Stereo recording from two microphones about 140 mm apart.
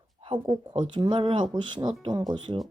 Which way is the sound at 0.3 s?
35° right (ahead or behind).